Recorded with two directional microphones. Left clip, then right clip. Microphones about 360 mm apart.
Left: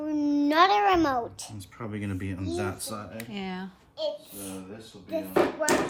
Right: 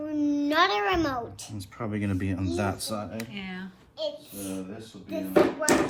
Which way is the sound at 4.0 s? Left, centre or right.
Left.